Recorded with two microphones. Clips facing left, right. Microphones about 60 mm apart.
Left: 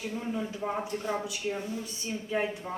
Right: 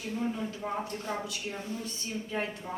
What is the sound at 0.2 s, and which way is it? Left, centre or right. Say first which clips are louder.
A woman's voice: right 1 dB; centre.